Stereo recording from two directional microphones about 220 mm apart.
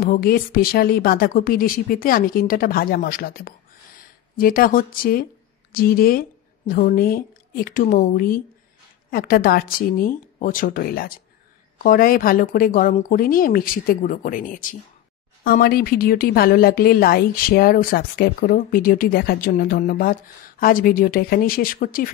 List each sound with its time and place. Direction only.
0.1 s speech: 40° left (ahead or behind)